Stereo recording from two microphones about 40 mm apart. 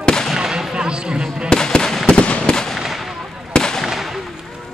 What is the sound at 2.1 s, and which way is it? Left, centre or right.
Fireworks, left.